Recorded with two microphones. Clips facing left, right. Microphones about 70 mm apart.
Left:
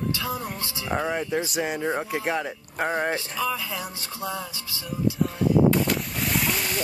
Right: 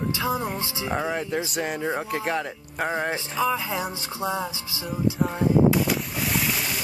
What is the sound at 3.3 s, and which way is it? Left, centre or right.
Speech, right.